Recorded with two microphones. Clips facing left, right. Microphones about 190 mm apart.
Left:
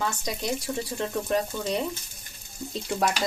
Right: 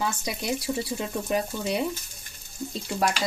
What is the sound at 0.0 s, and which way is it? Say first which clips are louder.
Speech: even; 10° right (ahead or behind).